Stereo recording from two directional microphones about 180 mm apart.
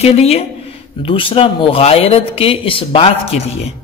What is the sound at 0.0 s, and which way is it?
A woman's voice, 35° left (ahead or behind).